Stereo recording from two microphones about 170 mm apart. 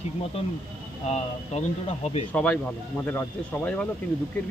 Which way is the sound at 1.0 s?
40° left (ahead or behind).